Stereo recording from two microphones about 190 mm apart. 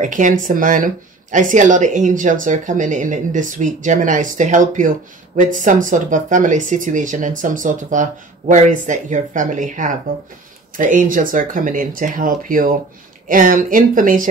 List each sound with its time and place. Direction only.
0.0 s speech: 40° right (ahead or behind)